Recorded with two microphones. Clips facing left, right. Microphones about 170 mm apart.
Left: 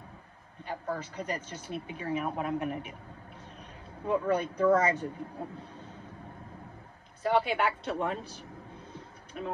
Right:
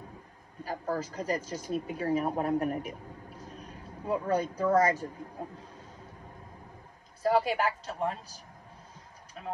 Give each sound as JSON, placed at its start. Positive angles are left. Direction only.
{"t": 0.7, "sound": "a woman's voice", "side_deg": -35}
{"t": 1.4, "sound": "speech", "side_deg": -10}
{"t": 1.7, "sound": "a woman's voice", "side_deg": -35}
{"t": 7.2, "sound": "a woman's voice", "side_deg": -35}